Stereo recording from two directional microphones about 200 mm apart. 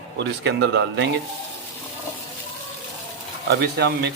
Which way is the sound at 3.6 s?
55° right (ahead or behind).